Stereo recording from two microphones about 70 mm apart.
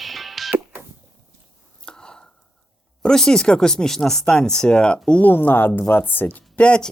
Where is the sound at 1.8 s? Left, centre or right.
Centre.